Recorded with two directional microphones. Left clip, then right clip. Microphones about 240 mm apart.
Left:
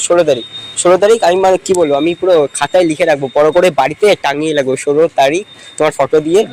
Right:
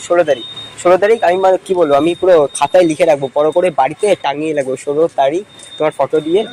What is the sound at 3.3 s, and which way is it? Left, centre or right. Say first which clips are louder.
Speech: left 3 dB; left.